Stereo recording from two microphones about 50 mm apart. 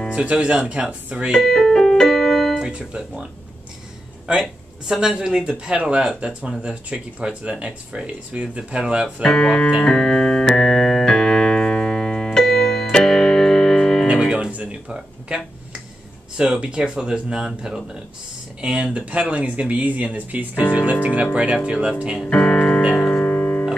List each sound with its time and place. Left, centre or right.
0.1 s speech: right
1.3 s keyboard: centre
2.5 s speech: centre
4.4 s speech: centre
9.2 s speech: centre
9.8 s keyboard: centre
12.4 s music: centre
14.3 s music: right
14.9 s speech: centre
19.0 s speech: right
22.2 s speech: centre
22.9 s music: centre